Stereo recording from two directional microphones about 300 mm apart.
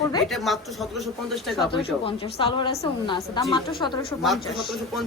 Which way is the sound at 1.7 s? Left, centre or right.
Centre.